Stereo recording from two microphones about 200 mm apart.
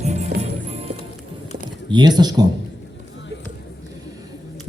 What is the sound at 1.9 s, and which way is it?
Speech, 20° right (ahead or behind).